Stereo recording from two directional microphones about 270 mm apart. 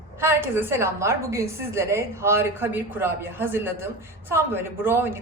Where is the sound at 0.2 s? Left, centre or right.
Centre.